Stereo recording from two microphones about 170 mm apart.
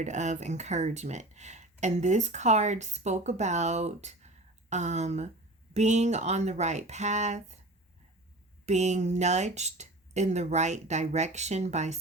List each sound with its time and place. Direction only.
0.0 s speech: 45° right (ahead or behind)
8.6 s speech: 40° right (ahead or behind)